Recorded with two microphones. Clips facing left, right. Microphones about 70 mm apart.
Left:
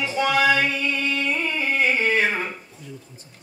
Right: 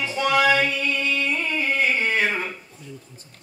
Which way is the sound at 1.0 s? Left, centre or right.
Left.